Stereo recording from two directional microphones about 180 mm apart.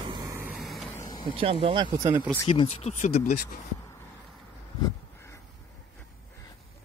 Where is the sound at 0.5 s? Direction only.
Centre (ahead or behind).